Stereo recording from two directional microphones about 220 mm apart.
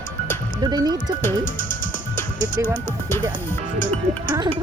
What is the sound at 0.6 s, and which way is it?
Speech, 20° right (ahead or behind).